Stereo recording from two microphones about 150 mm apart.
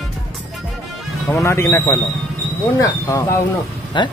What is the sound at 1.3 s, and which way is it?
A man's voice, 20° left (ahead or behind).